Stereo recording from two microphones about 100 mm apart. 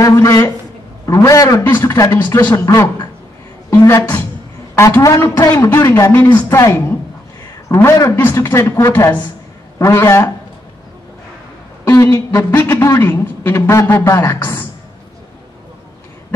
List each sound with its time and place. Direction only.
0.0 s a man's voice: 35° left (ahead or behind)
4.7 s a man's voice: 30° left (ahead or behind)
5.5 s a woman's voice: 20° left (ahead or behind)
11.8 s a woman's voice: 25° left (ahead or behind)
12.8 s a man's voice: 30° left (ahead or behind)